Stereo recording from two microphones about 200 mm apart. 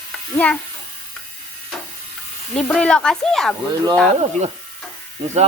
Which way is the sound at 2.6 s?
5° left (ahead or behind).